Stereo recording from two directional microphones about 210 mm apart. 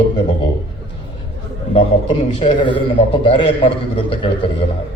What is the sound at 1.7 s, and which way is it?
A man's voice, 25° left (ahead or behind).